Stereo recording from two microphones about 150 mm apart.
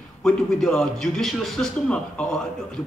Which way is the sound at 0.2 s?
5° left (ahead or behind).